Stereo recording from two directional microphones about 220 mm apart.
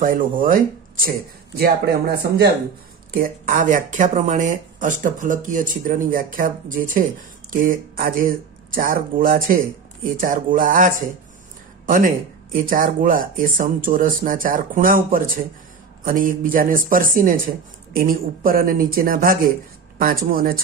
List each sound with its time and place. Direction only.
0.0 s speech: 40° right (ahead or behind)